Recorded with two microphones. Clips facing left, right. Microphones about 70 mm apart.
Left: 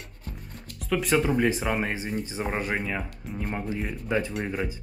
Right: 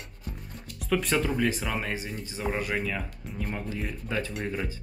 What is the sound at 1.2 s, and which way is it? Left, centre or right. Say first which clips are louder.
Speech: left 3 dB; centre.